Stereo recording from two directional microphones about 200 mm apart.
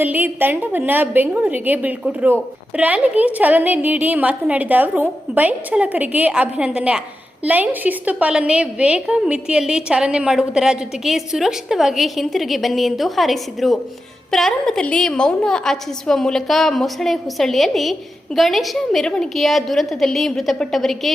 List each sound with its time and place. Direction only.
0.0 s a woman's voice: 10° right (ahead or behind)